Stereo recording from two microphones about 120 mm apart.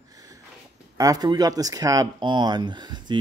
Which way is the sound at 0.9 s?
30° right (ahead or behind).